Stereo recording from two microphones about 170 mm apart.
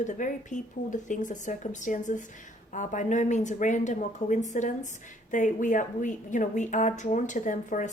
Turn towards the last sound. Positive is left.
turn(degrees=50)  # may be behind; listen again after turning